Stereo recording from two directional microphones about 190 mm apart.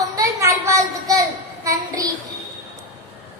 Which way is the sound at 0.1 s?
15° right (ahead or behind).